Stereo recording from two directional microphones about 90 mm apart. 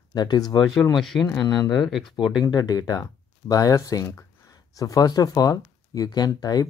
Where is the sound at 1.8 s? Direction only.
Centre (ahead or behind).